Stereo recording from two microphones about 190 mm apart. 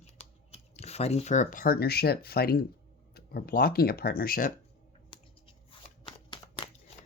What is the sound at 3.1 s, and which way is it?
Speech, 50° left (ahead or behind).